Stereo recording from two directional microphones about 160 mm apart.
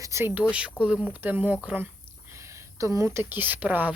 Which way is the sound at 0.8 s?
5° right (ahead or behind).